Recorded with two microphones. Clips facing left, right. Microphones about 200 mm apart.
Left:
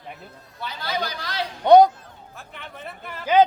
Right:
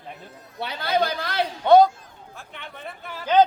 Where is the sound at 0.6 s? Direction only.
60° right (ahead or behind).